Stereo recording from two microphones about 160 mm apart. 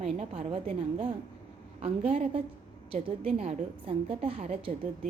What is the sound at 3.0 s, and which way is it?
Speech, 40° right (ahead or behind).